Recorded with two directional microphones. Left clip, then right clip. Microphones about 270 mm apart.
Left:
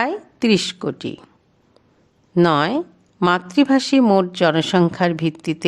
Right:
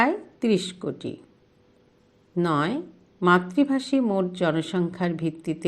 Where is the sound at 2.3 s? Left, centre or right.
Left.